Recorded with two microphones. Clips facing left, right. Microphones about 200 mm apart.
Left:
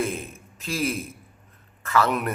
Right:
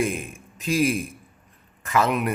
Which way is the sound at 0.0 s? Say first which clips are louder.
Right 2 dB; 15° right (ahead or behind).